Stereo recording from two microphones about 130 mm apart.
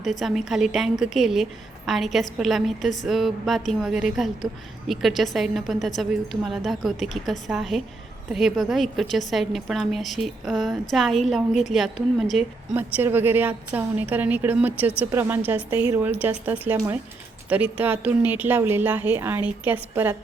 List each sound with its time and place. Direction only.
0.0 s a woman's voice: centre (ahead or behind)
12.7 s a woman's voice: 15° right (ahead or behind)
16.7 s speech: 25° right (ahead or behind)
17.5 s a woman's voice: 10° right (ahead or behind)